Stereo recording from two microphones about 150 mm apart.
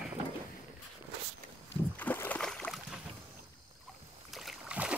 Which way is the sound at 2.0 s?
10° left (ahead or behind).